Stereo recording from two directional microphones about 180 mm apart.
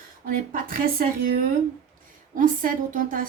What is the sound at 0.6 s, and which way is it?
A woman's voice, 50° right (ahead or behind).